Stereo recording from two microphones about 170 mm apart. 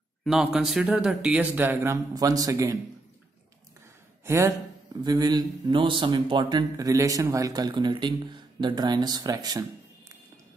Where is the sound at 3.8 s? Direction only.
15° right (ahead or behind).